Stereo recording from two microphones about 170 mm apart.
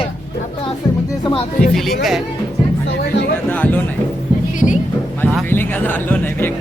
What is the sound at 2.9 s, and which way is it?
Speech, 90° left.